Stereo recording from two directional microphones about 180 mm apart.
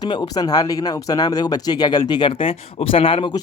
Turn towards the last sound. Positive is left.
turn(degrees=30)  # may be behind; listen again after turning